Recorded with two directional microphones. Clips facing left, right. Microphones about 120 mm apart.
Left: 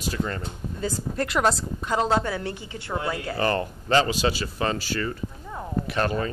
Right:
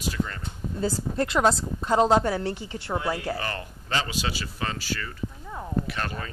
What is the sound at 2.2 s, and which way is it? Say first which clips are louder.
Speech: right 3 dB; 35° right (ahead or behind).